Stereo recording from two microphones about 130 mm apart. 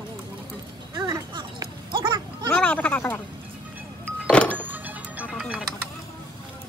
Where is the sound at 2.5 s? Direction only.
10° left (ahead or behind).